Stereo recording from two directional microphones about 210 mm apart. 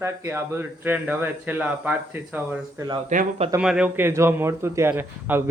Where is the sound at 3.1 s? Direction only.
35° right (ahead or behind).